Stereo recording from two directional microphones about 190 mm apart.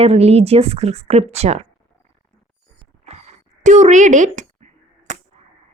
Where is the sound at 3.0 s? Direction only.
35° right (ahead or behind).